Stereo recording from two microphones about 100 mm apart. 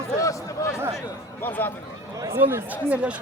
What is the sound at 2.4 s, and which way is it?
Speech, 20° right (ahead or behind).